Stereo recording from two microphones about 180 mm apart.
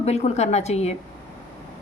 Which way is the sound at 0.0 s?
35° left (ahead or behind).